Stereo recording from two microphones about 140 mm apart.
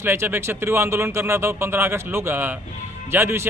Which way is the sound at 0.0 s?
15° right (ahead or behind).